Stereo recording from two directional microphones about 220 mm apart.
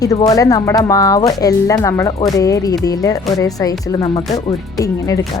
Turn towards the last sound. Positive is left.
turn(degrees=15)  # may be behind; listen again after turning